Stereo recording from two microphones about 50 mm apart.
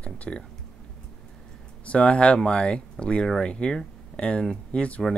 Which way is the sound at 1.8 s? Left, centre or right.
Left.